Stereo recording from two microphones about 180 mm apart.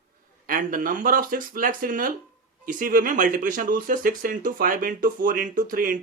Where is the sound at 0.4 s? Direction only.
50° right (ahead or behind).